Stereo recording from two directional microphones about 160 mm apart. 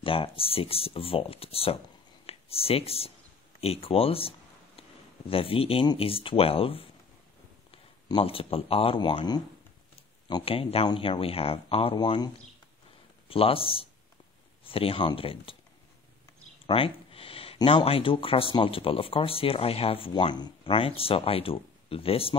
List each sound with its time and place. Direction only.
0.0 s speech: 35° left (ahead or behind)
5.3 s speech: 35° left (ahead or behind)
13.3 s speech: 35° left (ahead or behind)
16.6 s speech: 35° left (ahead or behind)